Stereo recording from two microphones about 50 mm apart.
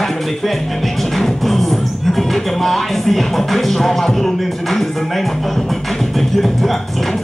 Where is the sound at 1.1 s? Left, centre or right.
Centre.